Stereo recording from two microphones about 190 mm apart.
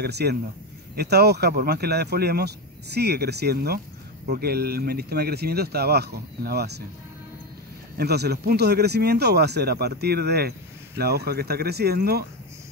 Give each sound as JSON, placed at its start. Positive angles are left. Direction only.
{"t": 0.0, "sound": "speech", "side_deg": -60}
{"t": 8.0, "sound": "speech", "side_deg": -60}